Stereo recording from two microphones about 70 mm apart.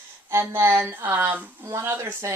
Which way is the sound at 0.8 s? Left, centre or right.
Right.